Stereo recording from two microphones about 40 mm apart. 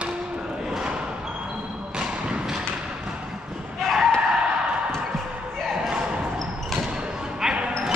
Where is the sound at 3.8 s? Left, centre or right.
Centre.